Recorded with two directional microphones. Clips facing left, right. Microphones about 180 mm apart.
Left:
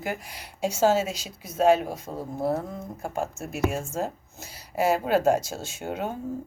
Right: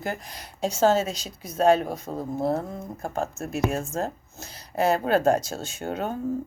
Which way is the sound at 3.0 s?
10° left (ahead or behind).